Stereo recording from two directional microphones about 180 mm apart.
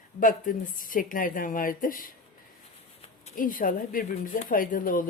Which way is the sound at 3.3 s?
50° left (ahead or behind).